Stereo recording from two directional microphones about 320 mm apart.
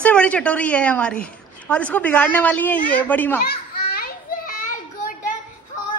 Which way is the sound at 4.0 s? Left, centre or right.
Left.